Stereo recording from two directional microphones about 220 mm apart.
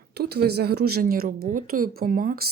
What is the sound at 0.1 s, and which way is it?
A woman's voice, 50° right (ahead or behind).